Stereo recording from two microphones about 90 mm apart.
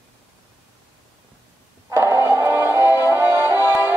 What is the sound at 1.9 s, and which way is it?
Music, 30° right (ahead or behind).